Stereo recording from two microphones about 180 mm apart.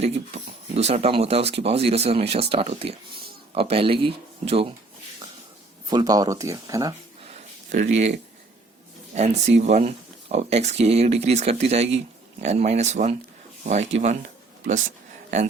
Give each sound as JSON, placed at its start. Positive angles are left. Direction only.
{"t": 0.0, "sound": "speech", "side_deg": -35}
{"t": 5.9, "sound": "speech", "side_deg": -20}
{"t": 7.3, "sound": "a sound", "side_deg": -40}
{"t": 9.1, "sound": "speech", "side_deg": -40}